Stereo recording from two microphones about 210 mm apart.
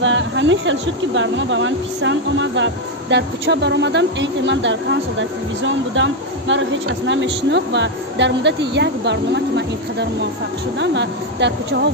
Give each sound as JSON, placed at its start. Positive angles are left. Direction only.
{"t": 0.0, "sound": "speech", "side_deg": -60}